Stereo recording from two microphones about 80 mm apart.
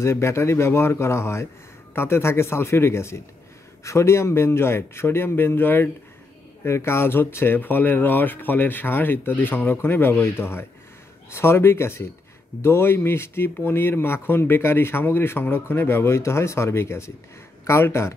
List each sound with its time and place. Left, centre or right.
0.0 s speech: left